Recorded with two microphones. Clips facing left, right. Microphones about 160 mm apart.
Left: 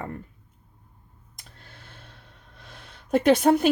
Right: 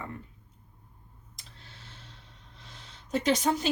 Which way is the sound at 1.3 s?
55° left (ahead or behind).